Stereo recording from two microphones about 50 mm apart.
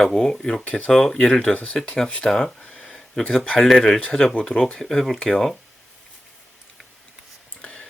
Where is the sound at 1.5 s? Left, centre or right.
Left.